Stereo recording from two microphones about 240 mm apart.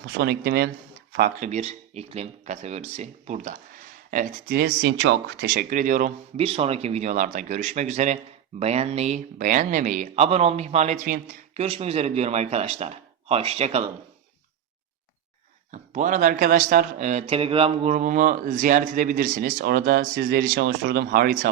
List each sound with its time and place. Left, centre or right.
0.2 s speech: right
1.5 s speech: right
15.7 s speech: right